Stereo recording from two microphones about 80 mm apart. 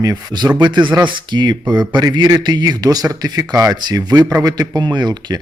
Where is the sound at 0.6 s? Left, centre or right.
Right.